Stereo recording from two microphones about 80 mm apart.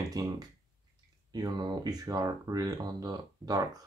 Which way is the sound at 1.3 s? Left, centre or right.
Right.